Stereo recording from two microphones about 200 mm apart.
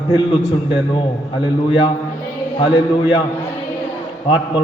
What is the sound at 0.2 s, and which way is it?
Speech, 25° left (ahead or behind).